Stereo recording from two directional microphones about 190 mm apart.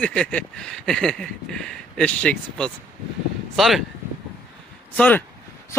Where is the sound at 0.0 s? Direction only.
5° left (ahead or behind).